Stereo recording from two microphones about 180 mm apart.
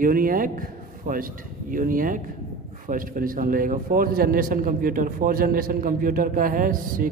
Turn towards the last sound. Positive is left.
turn(degrees=-50)  # may be behind; listen again after turning